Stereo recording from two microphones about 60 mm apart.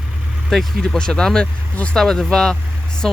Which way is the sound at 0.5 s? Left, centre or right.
Centre.